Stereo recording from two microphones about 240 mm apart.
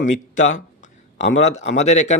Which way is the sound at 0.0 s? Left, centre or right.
Left.